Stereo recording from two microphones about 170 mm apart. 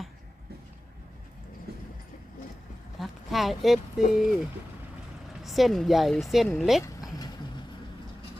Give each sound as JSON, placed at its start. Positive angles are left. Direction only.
{"t": 3.0, "sound": "speech", "side_deg": 0}
{"t": 5.4, "sound": "speech", "side_deg": 0}
{"t": 6.8, "sound": "a sound", "side_deg": 20}